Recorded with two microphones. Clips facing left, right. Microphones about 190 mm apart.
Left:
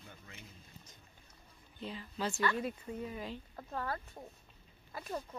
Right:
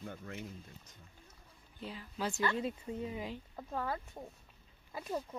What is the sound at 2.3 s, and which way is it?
Speech, 20° right (ahead or behind).